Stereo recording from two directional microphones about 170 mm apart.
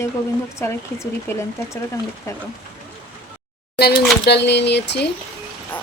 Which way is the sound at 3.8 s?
70° left (ahead or behind).